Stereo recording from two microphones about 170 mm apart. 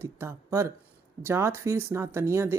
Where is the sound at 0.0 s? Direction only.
15° right (ahead or behind).